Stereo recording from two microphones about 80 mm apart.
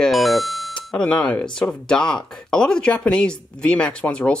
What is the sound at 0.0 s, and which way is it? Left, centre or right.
Doorbell, centre.